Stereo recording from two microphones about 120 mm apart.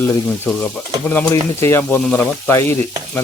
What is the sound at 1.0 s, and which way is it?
Speech, 10° left (ahead or behind).